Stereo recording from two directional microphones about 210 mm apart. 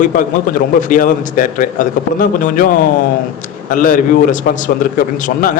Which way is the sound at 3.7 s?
40° left (ahead or behind).